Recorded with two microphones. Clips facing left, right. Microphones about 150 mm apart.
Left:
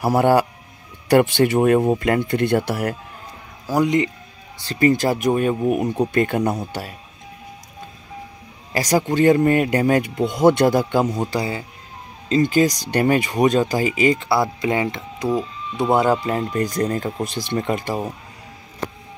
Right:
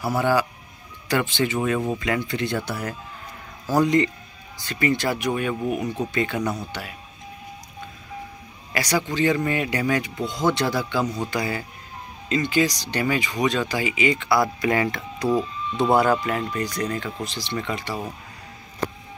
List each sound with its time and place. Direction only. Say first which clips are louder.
0.0 s speech: left 6 dB; 55° left (ahead or behind)
3.6 s speech: left 1 dB; 15° left (ahead or behind)
4.6 s speech: left 6 dB; 35° left (ahead or behind)
6.1 s speech: left 4 dB; 50° left (ahead or behind)
8.7 s speech: left 5 dB; 45° left (ahead or behind)
11.2 s speech: left 3 dB; 25° left (ahead or behind)
12.3 s speech: left 5 dB; 45° left (ahead or behind); by 16.2 s 20° left (ahead or behind)
16.2 s speech: left 4 dB; 30° left (ahead or behind)
17.2 s speech: left 5 dB; 55° left (ahead or behind)